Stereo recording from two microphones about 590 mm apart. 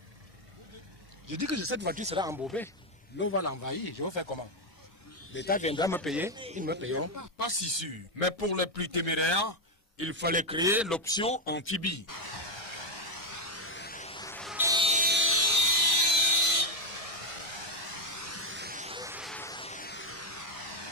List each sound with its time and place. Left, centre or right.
1.2 s speech: right; by 2.7 s centre
3.2 s a man's voice: left
5.3 s a man's voice: centre; by 7.2 s right
7.3 s speech: right
8.2 s a man's voice: right
9.9 s a sound: centre; by 20.9 s left